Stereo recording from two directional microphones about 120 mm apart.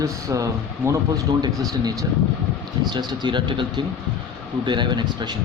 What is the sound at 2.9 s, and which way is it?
Speech, 40° right (ahead or behind).